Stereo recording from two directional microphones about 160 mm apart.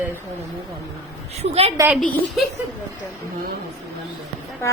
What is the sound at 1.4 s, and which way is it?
Speech, 40° right (ahead or behind).